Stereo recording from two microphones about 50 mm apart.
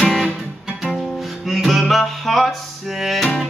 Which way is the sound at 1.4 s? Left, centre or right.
Centre.